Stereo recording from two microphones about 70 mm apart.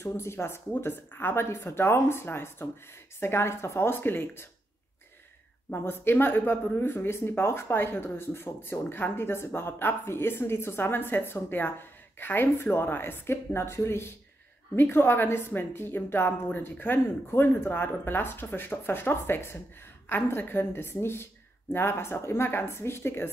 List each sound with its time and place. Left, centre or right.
0.0 s a woman's voice: left
5.7 s a woman's voice: left